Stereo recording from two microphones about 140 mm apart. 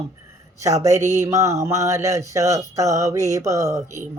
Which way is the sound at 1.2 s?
20° right (ahead or behind).